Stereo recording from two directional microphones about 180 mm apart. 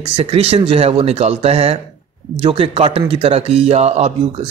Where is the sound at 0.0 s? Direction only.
35° right (ahead or behind).